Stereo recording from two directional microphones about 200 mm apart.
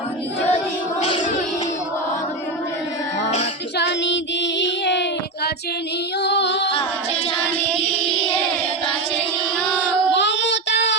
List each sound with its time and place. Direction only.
1.0 s music: 35° left (ahead or behind)
3.8 s child singing: 60° left (ahead or behind)
6.2 s music: 60° left (ahead or behind)
6.7 s a capella: 25° left (ahead or behind)
10.1 s child singing: 60° left (ahead or behind)